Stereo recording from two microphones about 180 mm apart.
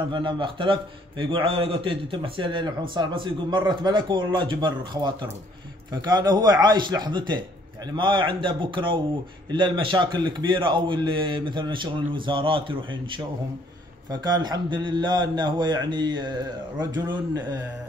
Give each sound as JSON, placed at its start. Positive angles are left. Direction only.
{"t": 0.1, "sound": "speech", "side_deg": -25}